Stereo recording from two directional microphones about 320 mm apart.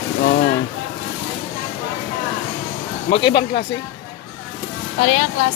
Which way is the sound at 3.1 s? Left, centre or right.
Centre.